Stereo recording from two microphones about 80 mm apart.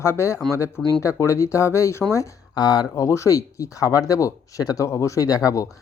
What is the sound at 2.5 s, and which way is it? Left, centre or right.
Speech, left.